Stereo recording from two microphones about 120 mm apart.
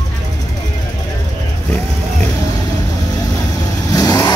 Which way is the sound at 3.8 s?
30° left (ahead or behind).